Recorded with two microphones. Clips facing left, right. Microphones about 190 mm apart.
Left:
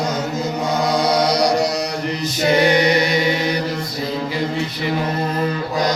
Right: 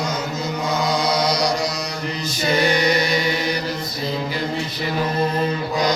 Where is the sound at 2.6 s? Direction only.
20° left (ahead or behind).